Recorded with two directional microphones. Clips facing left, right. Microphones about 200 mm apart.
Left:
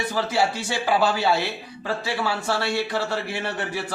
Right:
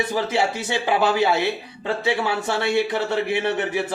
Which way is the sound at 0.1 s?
20° right (ahead or behind).